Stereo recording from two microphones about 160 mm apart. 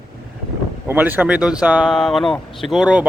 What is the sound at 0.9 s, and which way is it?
Speech, 10° right (ahead or behind).